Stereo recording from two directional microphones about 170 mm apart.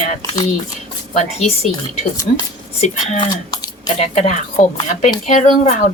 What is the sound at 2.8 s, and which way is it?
A woman's voice, 40° left (ahead or behind).